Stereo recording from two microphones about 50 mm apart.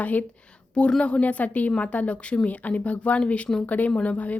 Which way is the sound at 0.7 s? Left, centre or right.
Centre.